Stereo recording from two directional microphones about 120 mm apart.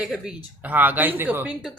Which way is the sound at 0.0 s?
5° right (ahead or behind).